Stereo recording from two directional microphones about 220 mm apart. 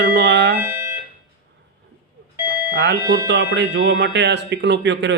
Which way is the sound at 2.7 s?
55° right (ahead or behind).